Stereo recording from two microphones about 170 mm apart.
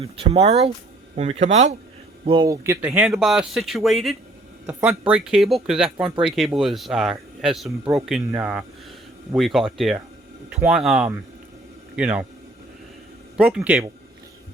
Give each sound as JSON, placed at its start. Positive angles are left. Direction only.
{"t": 0.0, "sound": "speech", "side_deg": -35}
{"t": 2.2, "sound": "speech", "side_deg": -30}
{"t": 2.5, "sound": "speech", "side_deg": -10}
{"t": 13.3, "sound": "speech", "side_deg": -5}